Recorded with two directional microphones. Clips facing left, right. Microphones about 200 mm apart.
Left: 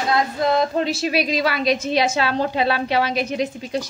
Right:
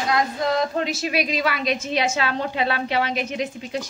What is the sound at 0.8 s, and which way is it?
A woman's voice, 30° left (ahead or behind).